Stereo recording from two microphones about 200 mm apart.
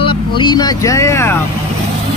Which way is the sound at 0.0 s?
25° left (ahead or behind).